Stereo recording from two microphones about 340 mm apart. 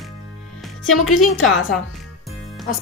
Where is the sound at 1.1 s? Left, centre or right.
Left.